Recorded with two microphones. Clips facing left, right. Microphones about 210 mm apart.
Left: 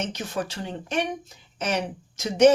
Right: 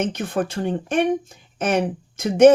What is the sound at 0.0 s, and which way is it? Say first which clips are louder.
Speech: right 6 dB; 55° right (ahead or behind).